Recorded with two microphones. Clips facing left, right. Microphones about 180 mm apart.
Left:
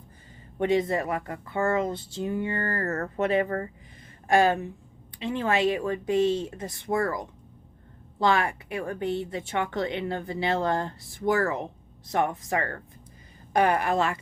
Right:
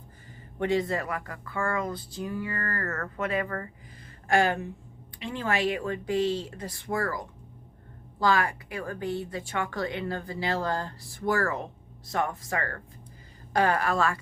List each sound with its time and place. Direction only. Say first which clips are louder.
0.6 s speech: left 3 dB; 20° left (ahead or behind)